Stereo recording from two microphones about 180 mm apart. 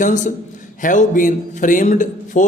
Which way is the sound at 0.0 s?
45° left (ahead or behind).